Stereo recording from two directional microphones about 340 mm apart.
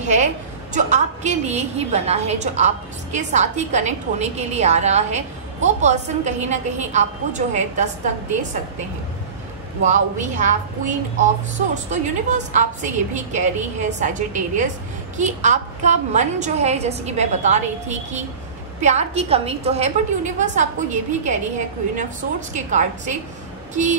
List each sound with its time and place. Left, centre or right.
0.0 s a sound: right
0.7 s a woman's voice: right
9.8 s a woman's voice: right
22.5 s a woman's voice: right